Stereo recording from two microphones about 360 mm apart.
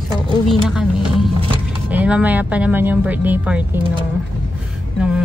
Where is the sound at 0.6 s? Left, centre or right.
Centre.